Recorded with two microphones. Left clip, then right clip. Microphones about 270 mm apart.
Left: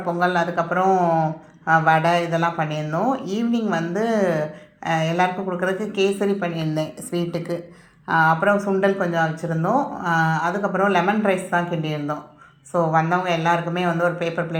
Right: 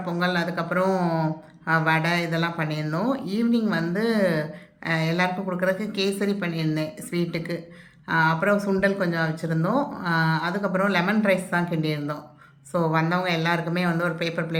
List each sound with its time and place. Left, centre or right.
0.0 s speech: centre